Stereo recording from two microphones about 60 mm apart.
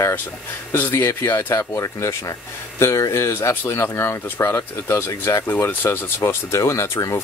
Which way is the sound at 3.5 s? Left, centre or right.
Left.